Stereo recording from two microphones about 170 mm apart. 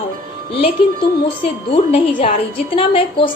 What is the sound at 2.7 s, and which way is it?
Speech, 30° left (ahead or behind).